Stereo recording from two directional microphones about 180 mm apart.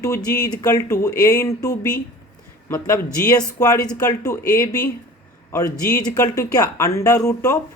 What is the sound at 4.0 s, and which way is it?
Speech, 20° left (ahead or behind).